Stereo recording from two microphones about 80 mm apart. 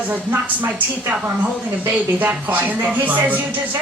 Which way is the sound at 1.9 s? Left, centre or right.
Right.